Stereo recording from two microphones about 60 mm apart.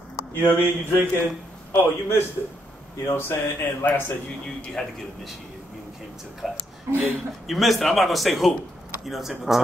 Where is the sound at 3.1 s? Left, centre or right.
Left.